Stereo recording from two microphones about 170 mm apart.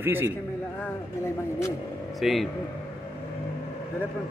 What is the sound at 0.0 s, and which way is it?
Speech, 15° right (ahead or behind).